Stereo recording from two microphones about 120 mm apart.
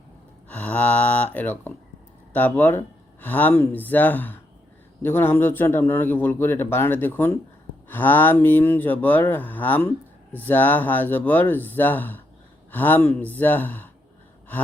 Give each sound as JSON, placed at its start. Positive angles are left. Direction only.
{"t": 0.4, "sound": "speech", "side_deg": 15}